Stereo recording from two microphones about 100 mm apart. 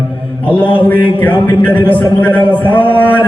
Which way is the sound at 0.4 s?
15° left (ahead or behind).